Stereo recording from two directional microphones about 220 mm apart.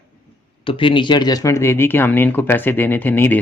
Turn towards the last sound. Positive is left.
turn(degrees=10)  # may be behind; listen again after turning